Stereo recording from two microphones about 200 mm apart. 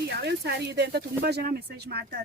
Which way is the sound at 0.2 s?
55° right (ahead or behind).